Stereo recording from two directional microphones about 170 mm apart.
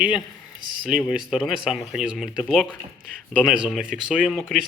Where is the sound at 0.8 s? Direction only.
5° right (ahead or behind).